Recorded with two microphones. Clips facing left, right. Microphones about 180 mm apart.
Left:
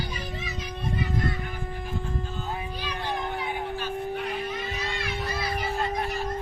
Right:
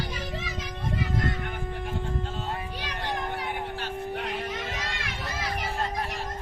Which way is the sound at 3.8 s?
75° right (ahead or behind).